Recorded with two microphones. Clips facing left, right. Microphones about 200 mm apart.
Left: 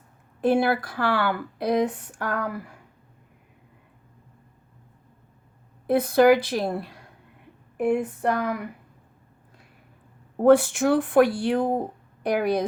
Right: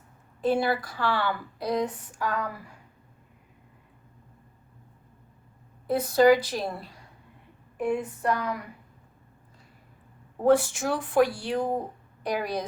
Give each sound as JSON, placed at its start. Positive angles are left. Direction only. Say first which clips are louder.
{"t": 0.4, "sound": "speech", "louder": "left 4 dB", "side_deg": 60}
{"t": 5.9, "sound": "speech", "louder": "left 2 dB", "side_deg": 55}
{"t": 10.3, "sound": "speech", "louder": "left 5 dB", "side_deg": 60}